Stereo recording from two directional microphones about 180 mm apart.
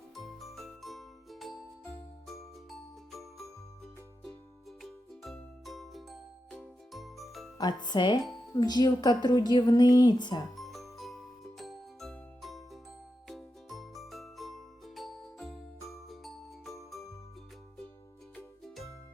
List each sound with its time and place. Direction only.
0.2 s music: centre (ahead or behind)
2.6 s music: centre (ahead or behind)
4.8 s music: centre (ahead or behind)
7.6 s a woman's voice: 25° left (ahead or behind)
10.6 s music: centre (ahead or behind)